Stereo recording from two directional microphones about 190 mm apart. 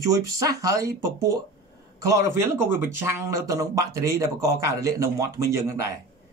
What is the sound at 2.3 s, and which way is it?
Speech, 10° right (ahead or behind).